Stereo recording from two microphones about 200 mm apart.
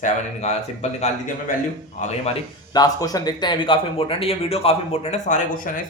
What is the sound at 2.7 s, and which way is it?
A man's voice, 20° left (ahead or behind).